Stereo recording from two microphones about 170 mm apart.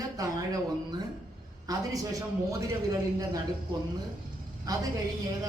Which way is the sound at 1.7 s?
20° right (ahead or behind).